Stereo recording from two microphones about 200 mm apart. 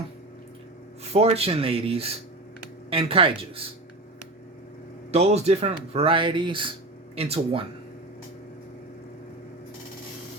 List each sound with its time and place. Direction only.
1.1 s speech: 30° right (ahead or behind)
5.1 s speech: 30° right (ahead or behind)